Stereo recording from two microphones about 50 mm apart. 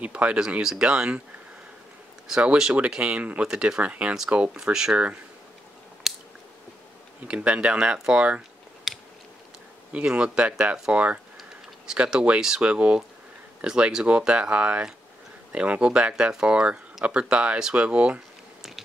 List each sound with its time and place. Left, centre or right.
0.0 s speech: right
2.4 s speech: centre
3.0 s speech: right
3.4 s speech: centre
3.8 s speech: right
6.0 s chewing: centre
7.2 s speech: right
8.9 s a sound: centre
9.9 s speech: centre
11.9 s speech: centre